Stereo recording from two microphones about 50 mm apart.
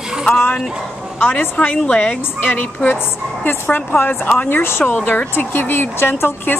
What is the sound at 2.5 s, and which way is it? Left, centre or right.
A woman's voice, left.